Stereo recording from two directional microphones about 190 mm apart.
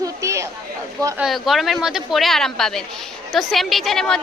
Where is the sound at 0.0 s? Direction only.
15° right (ahead or behind).